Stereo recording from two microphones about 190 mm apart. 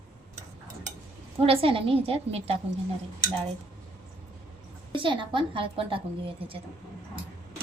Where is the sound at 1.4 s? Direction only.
30° right (ahead or behind).